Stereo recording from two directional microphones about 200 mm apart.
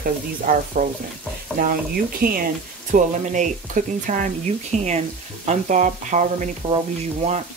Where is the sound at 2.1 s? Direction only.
45° right (ahead or behind).